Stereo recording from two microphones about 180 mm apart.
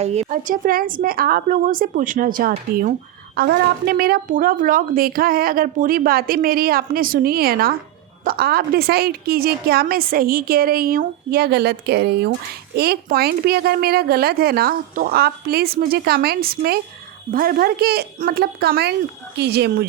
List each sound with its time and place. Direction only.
0.0 s a woman's voice: 35° right (ahead or behind); by 19.9 s 60° right (ahead or behind)